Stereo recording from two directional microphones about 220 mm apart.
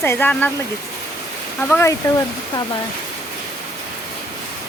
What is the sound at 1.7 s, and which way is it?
Speech, 10° left (ahead or behind).